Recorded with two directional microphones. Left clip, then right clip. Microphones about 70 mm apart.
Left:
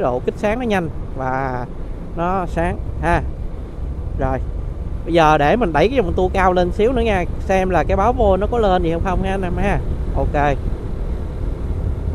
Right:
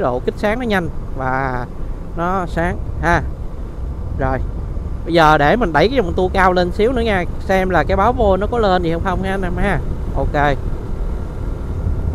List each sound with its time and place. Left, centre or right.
0.0 s speech: right
2.1 s speech: right